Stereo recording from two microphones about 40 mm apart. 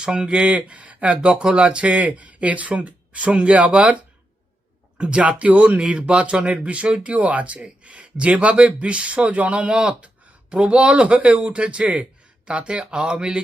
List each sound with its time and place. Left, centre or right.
0.0 s speech: centre
0.3 s speech: right
1.3 s speech: centre